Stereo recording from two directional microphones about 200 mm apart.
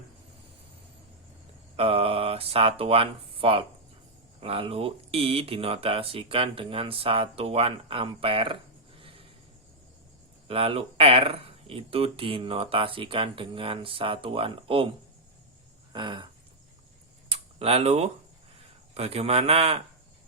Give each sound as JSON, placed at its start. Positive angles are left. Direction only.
{"t": 1.7, "sound": "speech", "side_deg": -30}
{"t": 9.0, "sound": "a sound", "side_deg": -25}
{"t": 10.5, "sound": "speech", "side_deg": -30}
{"t": 17.3, "sound": "a man's voice", "side_deg": -30}